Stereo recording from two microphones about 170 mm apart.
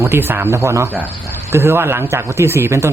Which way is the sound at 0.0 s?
15° right (ahead or behind).